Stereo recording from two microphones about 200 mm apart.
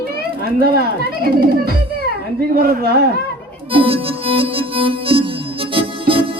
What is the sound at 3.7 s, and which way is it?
Music, 25° right (ahead or behind).